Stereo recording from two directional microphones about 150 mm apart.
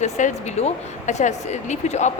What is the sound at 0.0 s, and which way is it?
Speech, 55° left (ahead or behind).